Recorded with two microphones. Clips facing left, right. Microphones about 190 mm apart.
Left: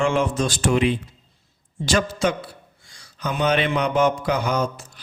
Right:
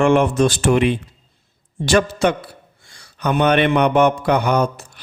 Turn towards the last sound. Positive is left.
turn(degrees=-60)  # may be behind; listen again after turning